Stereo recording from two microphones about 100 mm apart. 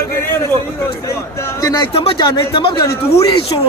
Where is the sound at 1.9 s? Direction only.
65° left (ahead or behind).